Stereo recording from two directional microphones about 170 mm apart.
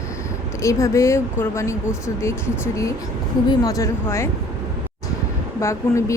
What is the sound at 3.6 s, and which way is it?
Speech, 20° left (ahead or behind).